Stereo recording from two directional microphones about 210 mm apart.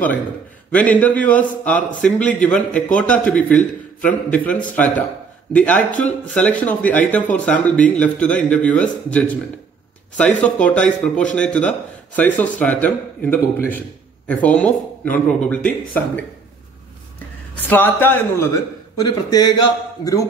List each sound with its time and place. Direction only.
0.7 s a man's voice: 5° left (ahead or behind)
17.6 s a man's voice: 10° left (ahead or behind)